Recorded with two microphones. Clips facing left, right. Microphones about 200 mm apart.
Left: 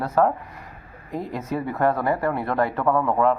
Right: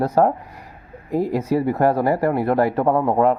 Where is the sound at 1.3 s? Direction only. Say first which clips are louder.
Right 5 dB; 35° right (ahead or behind).